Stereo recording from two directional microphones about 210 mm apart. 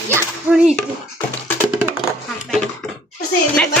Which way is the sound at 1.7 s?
10° right (ahead or behind).